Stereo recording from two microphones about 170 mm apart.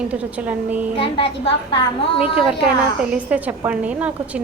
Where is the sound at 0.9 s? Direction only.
30° left (ahead or behind).